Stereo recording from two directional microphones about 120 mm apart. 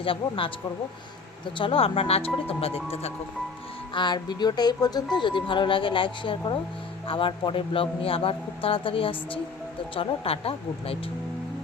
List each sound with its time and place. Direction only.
0.0 s a man's voice: 50° left (ahead or behind)
1.5 s a man's voice: 50° left (ahead or behind)
3.9 s a man's voice: 40° left (ahead or behind); by 10.9 s 55° left (ahead or behind)